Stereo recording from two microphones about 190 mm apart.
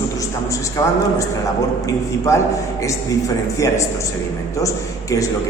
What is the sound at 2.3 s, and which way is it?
Speech, 15° left (ahead or behind).